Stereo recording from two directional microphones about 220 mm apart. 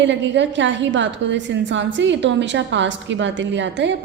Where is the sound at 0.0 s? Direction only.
55° right (ahead or behind).